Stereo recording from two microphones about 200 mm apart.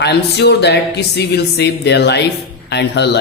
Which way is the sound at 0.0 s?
55° left (ahead or behind).